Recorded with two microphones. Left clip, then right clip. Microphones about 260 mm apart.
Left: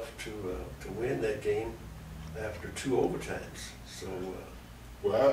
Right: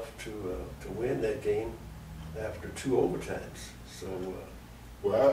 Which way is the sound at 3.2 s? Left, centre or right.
Centre.